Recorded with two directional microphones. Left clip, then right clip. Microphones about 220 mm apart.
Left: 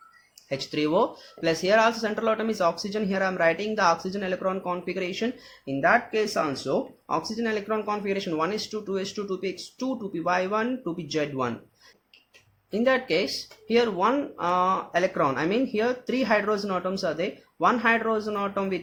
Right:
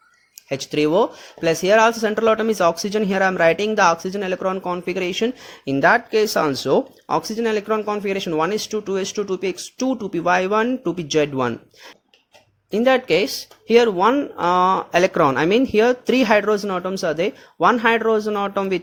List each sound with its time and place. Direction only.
0.4 s speech: 30° right (ahead or behind)
12.7 s speech: 35° right (ahead or behind)